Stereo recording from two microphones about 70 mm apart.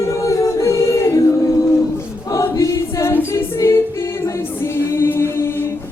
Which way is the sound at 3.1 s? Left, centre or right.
Left.